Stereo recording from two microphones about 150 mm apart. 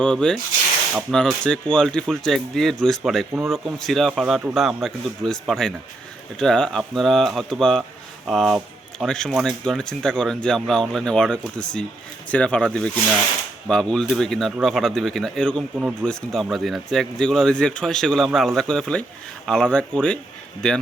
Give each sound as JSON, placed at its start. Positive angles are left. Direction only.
{"t": 0.0, "sound": "speech", "side_deg": 5}
{"t": 15.8, "sound": "speech", "side_deg": -10}
{"t": 16.0, "sound": "speech", "side_deg": 0}